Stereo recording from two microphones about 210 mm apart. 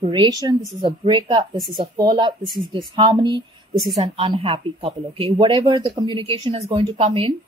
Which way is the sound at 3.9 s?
30° right (ahead or behind).